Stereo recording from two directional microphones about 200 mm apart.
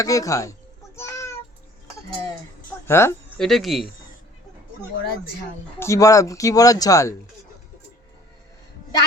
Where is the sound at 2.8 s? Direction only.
10° left (ahead or behind).